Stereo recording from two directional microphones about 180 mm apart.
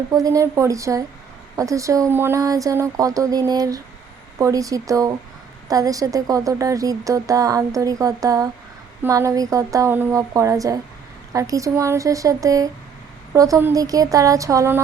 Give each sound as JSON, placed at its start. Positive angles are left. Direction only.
{"t": 0.1, "sound": "a woman's voice", "side_deg": -20}